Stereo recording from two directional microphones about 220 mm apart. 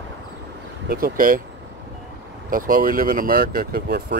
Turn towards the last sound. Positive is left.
turn(degrees=-45)  # may be behind; listen again after turning